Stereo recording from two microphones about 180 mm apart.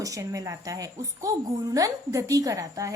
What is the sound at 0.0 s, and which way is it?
Speech, 20° right (ahead or behind).